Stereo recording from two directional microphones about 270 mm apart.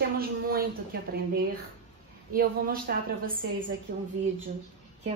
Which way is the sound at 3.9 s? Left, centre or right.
Right.